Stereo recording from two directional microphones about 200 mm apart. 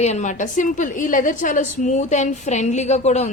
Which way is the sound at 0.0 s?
35° left (ahead or behind).